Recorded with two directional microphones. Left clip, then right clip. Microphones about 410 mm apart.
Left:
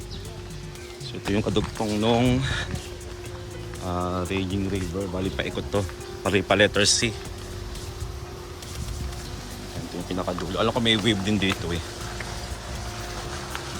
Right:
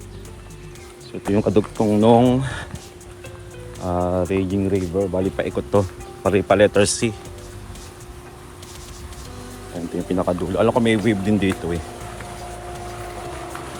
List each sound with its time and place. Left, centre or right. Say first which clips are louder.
1.2 s speech: right 6 dB; centre
1.5 s speech: right 8 dB; right
2.0 s speech: right 8 dB; centre
3.8 s speech: right 7 dB; centre
10.1 s speech: right 7 dB; centre